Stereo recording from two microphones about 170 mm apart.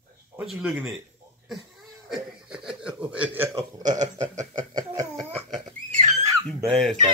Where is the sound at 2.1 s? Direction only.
5° right (ahead or behind).